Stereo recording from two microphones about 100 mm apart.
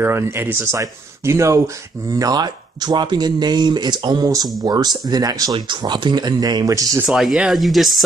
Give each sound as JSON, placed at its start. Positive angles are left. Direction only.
{"t": 0.0, "sound": "speech", "side_deg": -25}
{"t": 2.1, "sound": "speech", "side_deg": -40}
{"t": 7.1, "sound": "speech", "side_deg": -5}